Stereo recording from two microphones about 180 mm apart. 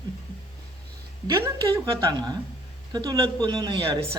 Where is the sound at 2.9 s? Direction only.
25° right (ahead or behind).